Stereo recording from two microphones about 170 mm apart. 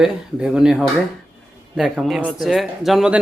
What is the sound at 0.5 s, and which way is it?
Speech, 5° right (ahead or behind).